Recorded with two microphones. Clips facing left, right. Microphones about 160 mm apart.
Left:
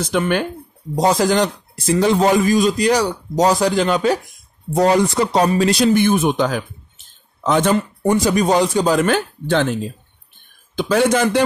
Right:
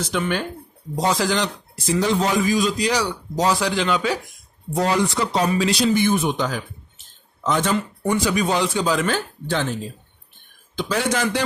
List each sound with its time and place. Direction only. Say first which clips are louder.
0.1 s speech: left 6 dB; 55° left (ahead or behind)
0.9 s a man's voice: left 6 dB; 40° left (ahead or behind); by 9.8 s 60° left (ahead or behind)
10.8 s a man's voice: left 7 dB; 55° left (ahead or behind)